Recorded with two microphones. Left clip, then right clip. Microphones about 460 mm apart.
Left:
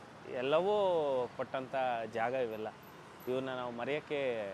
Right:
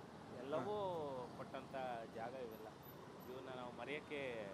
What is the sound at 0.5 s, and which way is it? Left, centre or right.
Speech, left.